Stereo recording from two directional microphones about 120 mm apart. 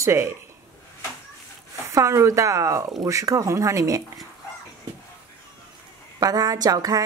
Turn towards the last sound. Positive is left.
turn(degrees=-30)  # may be behind; listen again after turning